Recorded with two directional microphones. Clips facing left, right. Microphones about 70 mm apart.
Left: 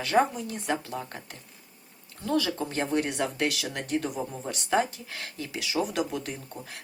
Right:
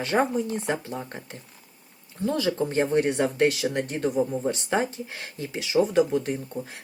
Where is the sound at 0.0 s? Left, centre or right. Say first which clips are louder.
Right 1 dB; right.